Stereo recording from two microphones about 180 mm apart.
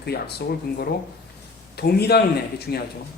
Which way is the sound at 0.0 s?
60° left (ahead or behind).